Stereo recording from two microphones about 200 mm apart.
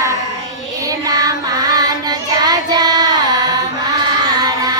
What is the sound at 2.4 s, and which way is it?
Child singing, 20° right (ahead or behind).